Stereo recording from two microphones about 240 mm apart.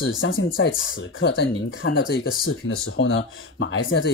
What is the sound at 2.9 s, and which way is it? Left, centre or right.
Speech, left.